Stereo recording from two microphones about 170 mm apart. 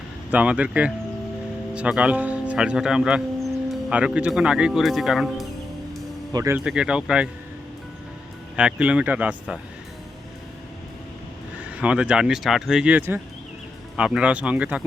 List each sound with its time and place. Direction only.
0.3 s speech: 5° right (ahead or behind)
6.3 s speech: 20° right (ahead or behind)
6.7 s speech: 5° right (ahead or behind)
8.5 s speech: 5° right (ahead or behind)
11.8 s speech: 5° right (ahead or behind)